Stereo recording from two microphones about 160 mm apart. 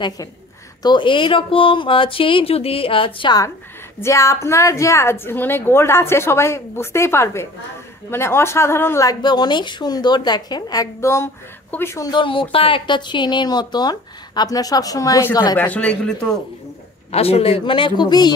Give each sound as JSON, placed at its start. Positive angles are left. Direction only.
{"t": 0.8, "sound": "a woman's voice", "side_deg": 30}
{"t": 15.5, "sound": "a woman's voice", "side_deg": 10}
{"t": 17.1, "sound": "speech", "side_deg": 40}